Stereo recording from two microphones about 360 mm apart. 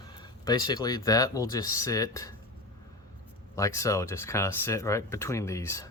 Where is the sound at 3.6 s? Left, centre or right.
Centre.